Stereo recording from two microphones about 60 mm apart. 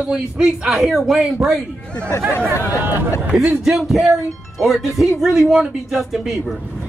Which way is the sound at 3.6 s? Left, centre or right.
Centre.